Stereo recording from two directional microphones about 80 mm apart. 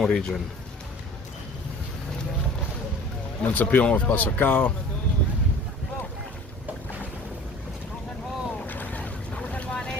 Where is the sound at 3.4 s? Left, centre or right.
Centre.